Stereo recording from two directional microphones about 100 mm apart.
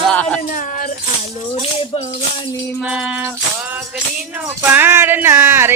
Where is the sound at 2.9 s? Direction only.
5° right (ahead or behind).